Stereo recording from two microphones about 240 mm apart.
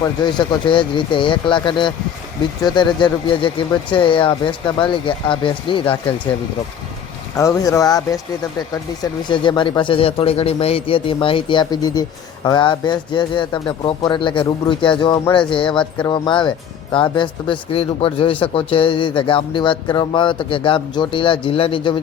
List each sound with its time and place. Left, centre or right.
0.0 s speech: centre
7.3 s speech: centre
9.3 s speech: centre